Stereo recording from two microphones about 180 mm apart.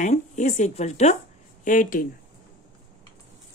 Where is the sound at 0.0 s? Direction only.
45° left (ahead or behind).